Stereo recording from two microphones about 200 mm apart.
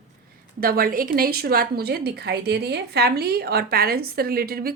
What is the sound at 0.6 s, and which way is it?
A woman's voice, 45° right (ahead or behind).